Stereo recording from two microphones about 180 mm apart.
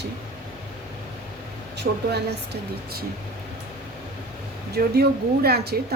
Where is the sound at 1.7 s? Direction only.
65° right (ahead or behind).